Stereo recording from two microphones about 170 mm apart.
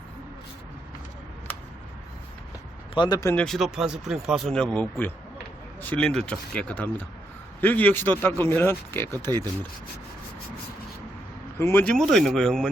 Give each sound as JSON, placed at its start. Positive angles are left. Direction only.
{"t": 2.9, "sound": "speech", "side_deg": 25}
{"t": 3.3, "sound": "speech", "side_deg": 0}
{"t": 11.5, "sound": "speech", "side_deg": 10}